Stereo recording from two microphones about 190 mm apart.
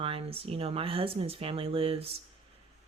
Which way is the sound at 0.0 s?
30° right (ahead or behind).